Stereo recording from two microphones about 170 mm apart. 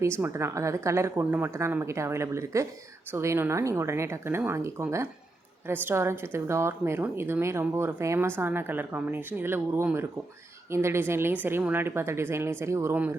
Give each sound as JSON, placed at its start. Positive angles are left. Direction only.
{"t": 0.0, "sound": "a woman's voice", "side_deg": -15}